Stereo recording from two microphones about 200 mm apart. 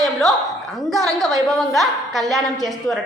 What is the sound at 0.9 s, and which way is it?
A woman's voice, centre (ahead or behind).